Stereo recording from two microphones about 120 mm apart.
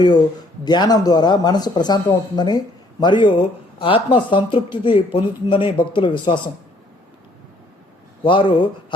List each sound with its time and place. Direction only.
0.6 s speech: 35° left (ahead or behind)
8.2 s speech: 40° left (ahead or behind)